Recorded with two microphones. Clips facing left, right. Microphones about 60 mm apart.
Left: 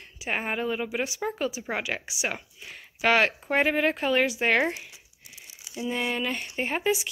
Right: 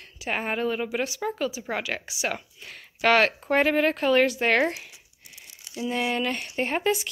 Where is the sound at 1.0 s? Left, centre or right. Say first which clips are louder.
Right 1 dB; left.